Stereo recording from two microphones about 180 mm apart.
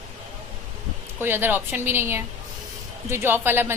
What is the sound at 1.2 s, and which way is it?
A woman's voice, 10° right (ahead or behind).